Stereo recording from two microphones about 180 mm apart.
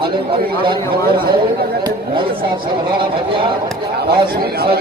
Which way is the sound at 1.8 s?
25° right (ahead or behind).